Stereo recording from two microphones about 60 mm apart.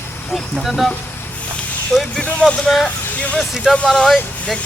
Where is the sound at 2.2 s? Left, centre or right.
Centre.